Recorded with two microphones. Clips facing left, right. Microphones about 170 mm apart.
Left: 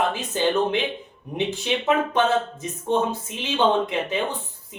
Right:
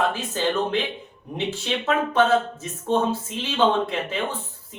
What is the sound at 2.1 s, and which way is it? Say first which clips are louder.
Speech: right 2 dB; 15° left (ahead or behind).